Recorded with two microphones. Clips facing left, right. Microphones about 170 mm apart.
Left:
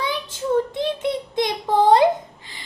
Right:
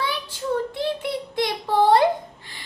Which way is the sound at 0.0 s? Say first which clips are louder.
Left 2 dB; 20° left (ahead or behind).